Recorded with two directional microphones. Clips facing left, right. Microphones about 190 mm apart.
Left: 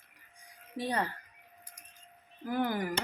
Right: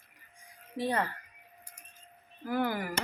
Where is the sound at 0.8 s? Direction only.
15° left (ahead or behind).